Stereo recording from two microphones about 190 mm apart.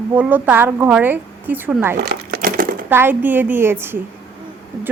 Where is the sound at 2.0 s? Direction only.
55° right (ahead or behind).